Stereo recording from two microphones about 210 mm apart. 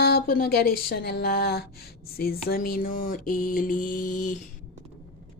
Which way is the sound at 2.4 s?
45° left (ahead or behind).